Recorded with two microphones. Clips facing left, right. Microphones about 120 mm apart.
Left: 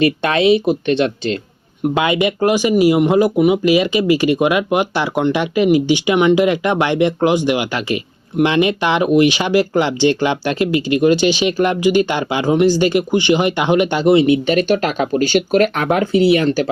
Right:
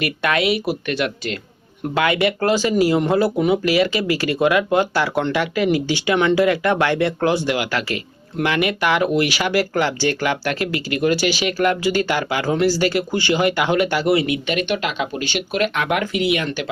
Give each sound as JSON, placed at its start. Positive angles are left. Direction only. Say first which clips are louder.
{"t": 0.0, "sound": "speech", "louder": "left 6 dB", "side_deg": 25}